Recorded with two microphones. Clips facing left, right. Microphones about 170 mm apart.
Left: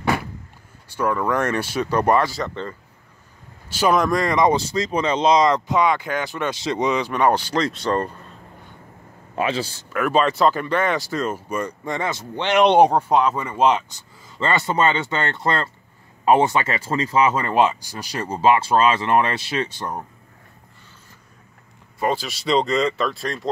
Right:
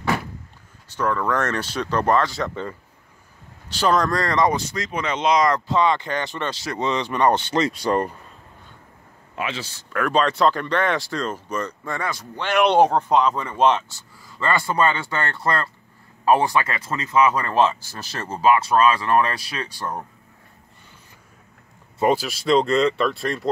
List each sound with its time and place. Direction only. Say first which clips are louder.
0.8 s speech: left 1 dB; 10° left (ahead or behind)
2.3 s speech: even; 5° right (ahead or behind)
3.6 s speech: left 1 dB; 10° left (ahead or behind)
4.6 s speech: left 5 dB; 30° left (ahead or behind)
5.7 s speech: left 1 dB; 10° left (ahead or behind)
7.5 s speech: right 1 dB; 10° right (ahead or behind)
9.3 s a man's voice: left 6 dB; 35° left (ahead or behind)
9.9 s speech: left 1 dB; 5° left (ahead or behind)
18.4 s speech: even; 30° left (ahead or behind)
22.2 s speech: right 2 dB; centre (ahead or behind)